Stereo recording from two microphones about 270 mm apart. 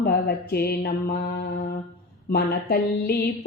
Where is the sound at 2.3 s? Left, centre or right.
Left.